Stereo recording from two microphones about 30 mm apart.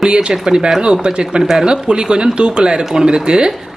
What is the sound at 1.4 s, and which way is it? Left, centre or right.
Speech, centre.